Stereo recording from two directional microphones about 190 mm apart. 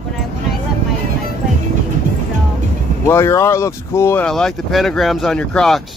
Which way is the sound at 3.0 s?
15° left (ahead or behind).